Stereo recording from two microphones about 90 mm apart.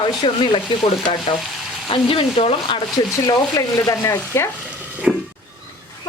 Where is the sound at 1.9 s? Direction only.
90° left.